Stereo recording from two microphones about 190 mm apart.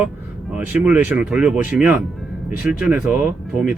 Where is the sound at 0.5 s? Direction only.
10° right (ahead or behind).